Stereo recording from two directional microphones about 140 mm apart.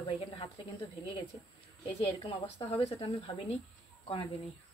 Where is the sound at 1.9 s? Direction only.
45° left (ahead or behind).